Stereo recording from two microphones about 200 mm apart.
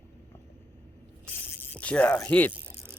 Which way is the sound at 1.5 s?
10° left (ahead or behind).